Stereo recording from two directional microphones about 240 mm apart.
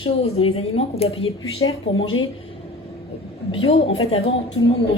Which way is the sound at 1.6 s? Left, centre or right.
Left.